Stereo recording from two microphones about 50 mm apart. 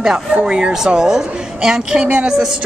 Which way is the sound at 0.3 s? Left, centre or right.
Centre.